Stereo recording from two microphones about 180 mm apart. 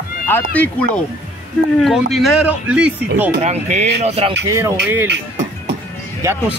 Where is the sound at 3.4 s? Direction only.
40° right (ahead or behind).